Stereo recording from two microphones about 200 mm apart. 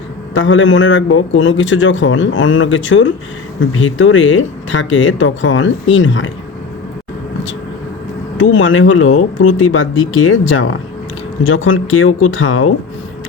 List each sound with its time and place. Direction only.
0.3 s a man's voice: 70° left (ahead or behind)
8.4 s speech: 80° left